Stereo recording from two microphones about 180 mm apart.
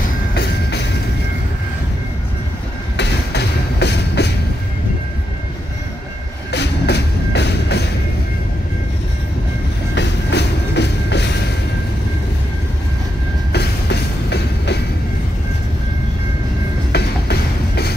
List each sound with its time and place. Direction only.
0.3 s music: 70° left (ahead or behind)
3.0 s train: 70° left (ahead or behind)
6.5 s music: 70° left (ahead or behind)
9.9 s music: 70° left (ahead or behind)
13.5 s train: 65° left (ahead or behind)
16.9 s music: 60° left (ahead or behind)